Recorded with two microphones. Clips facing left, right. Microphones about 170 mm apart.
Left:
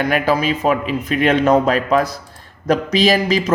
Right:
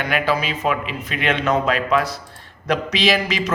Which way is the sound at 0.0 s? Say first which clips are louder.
Left 4 dB; 45° left (ahead or behind).